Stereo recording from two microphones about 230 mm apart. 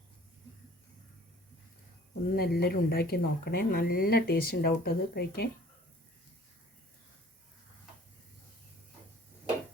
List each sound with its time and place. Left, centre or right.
2.3 s a woman's voice: left